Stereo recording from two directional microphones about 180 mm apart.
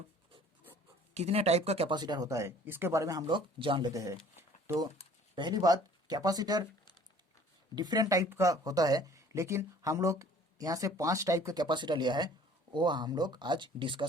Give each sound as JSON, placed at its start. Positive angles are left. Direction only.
{"t": 1.1, "sound": "speech", "side_deg": -35}
{"t": 7.8, "sound": "speech", "side_deg": -20}